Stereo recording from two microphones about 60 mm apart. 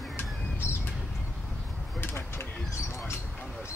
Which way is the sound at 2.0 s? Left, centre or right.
Left.